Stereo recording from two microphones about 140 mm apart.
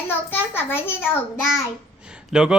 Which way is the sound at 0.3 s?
15° left (ahead or behind).